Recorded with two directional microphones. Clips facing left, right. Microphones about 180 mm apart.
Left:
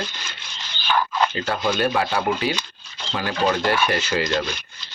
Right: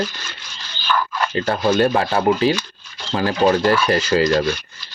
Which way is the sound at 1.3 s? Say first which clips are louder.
Right 6 dB; 35° right (ahead or behind).